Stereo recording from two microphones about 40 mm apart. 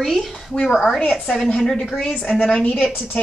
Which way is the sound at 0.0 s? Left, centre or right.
Centre.